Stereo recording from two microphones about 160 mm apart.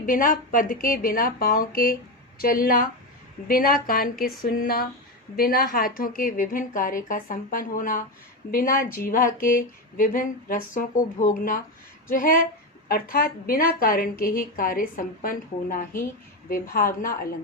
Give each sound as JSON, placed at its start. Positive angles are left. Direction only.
{"t": 0.0, "sound": "speech", "side_deg": 60}